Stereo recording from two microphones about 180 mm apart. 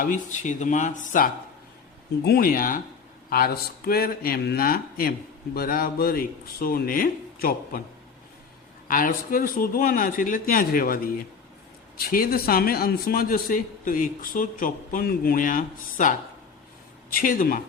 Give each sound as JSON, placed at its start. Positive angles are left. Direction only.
{"t": 0.0, "sound": "a man's voice", "side_deg": 45}
{"t": 8.9, "sound": "a man's voice", "side_deg": 50}